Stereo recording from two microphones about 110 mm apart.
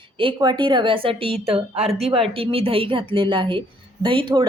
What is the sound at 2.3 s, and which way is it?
A woman's voice, 55° right (ahead or behind).